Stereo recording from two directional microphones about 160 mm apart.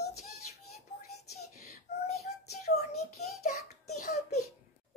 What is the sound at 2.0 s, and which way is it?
Child singing, 45° left (ahead or behind).